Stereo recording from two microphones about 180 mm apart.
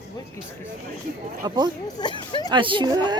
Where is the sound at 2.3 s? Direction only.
25° left (ahead or behind).